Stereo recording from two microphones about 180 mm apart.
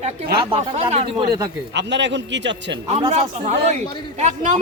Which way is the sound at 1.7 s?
75° right (ahead or behind).